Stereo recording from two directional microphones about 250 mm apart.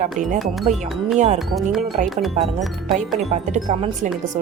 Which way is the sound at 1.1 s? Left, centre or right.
Right.